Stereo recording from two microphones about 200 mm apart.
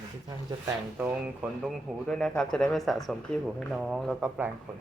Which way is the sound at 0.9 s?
10° right (ahead or behind).